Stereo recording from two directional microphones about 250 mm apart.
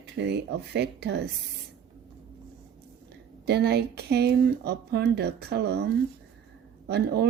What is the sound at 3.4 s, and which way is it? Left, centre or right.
Speech, right.